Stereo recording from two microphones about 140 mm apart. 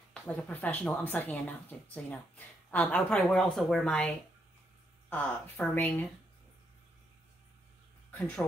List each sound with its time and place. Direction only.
0.1 s speech: 10° left (ahead or behind)
5.1 s speech: 15° left (ahead or behind)